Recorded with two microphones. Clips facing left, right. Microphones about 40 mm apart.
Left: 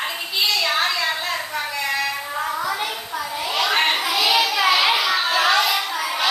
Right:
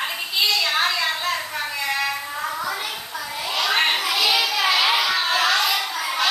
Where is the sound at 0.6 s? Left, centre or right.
Centre.